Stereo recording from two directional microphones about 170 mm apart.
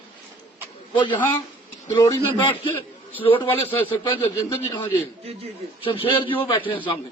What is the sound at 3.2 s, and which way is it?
Speech, 35° left (ahead or behind).